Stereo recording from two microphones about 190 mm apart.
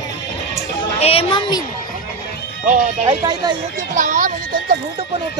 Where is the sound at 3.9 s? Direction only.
40° right (ahead or behind).